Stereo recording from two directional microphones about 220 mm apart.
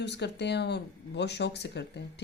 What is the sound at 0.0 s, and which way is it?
Speech, 50° left (ahead or behind).